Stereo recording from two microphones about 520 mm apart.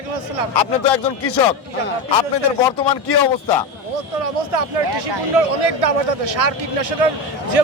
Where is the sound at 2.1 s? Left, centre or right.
Centre.